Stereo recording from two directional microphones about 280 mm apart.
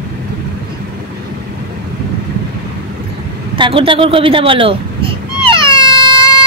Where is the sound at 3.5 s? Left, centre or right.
Centre.